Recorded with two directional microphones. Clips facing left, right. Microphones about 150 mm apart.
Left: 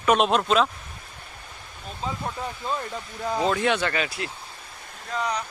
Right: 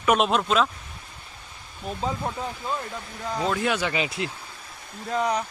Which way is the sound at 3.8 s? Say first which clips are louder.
Even; 20° right (ahead or behind).